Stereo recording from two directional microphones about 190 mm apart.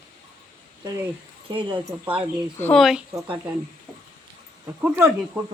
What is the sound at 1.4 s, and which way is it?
Speech, 25° right (ahead or behind).